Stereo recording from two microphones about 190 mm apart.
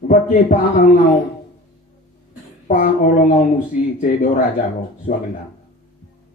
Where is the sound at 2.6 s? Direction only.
40° left (ahead or behind).